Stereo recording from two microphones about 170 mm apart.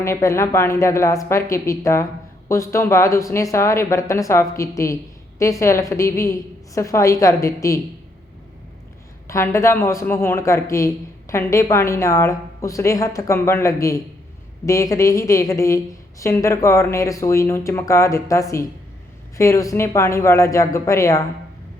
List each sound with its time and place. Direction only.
0.0 s a man's voice: 15° left (ahead or behind)
9.2 s a man's voice: 15° left (ahead or behind)